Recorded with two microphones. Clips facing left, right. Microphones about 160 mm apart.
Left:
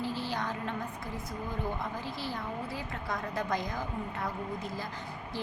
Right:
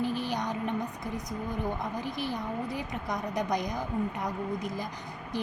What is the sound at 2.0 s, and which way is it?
A woman's voice, 15° right (ahead or behind).